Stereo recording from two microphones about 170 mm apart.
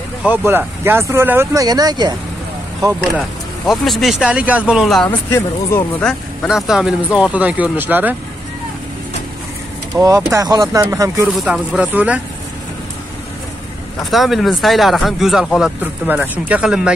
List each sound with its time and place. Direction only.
0.2 s speech: 10° right (ahead or behind)
3.6 s speech: centre (ahead or behind)
5.0 s speech: 15° left (ahead or behind); by 8.2 s 10° right (ahead or behind)
9.9 s speech: 20° right (ahead or behind)
11.2 s speech: 5° right (ahead or behind)
14.1 s speech: centre (ahead or behind)
15.8 s speech: 10° right (ahead or behind)